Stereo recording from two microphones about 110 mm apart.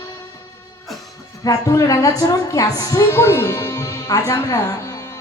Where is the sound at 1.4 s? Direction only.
30° left (ahead or behind).